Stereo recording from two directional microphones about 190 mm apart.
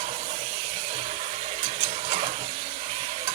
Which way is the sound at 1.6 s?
35° right (ahead or behind).